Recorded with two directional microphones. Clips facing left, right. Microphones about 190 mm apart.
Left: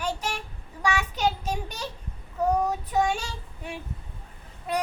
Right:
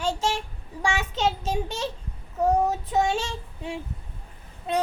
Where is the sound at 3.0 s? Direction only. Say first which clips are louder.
Right 2 dB; 25° right (ahead or behind).